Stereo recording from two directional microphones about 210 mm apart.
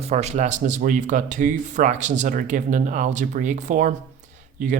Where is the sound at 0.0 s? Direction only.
30° right (ahead or behind).